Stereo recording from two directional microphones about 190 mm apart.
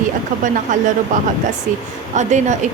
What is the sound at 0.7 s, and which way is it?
Speech, 45° right (ahead or behind).